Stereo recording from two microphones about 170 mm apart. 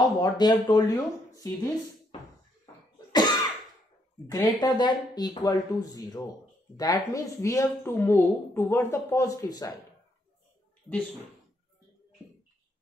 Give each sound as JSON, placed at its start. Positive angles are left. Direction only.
{"t": 0.2, "sound": "speech", "side_deg": 25}
{"t": 2.6, "sound": "cough", "side_deg": 25}
{"t": 4.3, "sound": "speech", "side_deg": 20}